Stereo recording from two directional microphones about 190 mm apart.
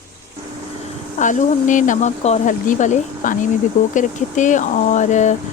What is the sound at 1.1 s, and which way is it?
Speech, 40° left (ahead or behind).